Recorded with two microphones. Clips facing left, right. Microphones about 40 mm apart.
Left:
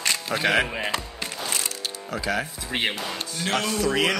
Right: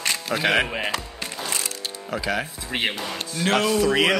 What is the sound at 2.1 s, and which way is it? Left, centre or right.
Speech, centre.